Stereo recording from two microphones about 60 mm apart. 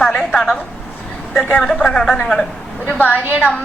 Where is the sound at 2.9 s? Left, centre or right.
Left.